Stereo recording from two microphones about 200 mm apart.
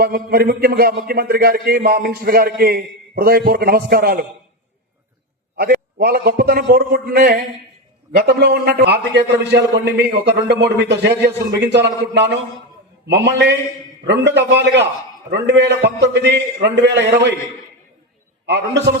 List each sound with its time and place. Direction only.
0.0 s a man's voice: 50° right (ahead or behind)
5.5 s a man's voice: 50° right (ahead or behind)
18.4 s a man's voice: 60° right (ahead or behind)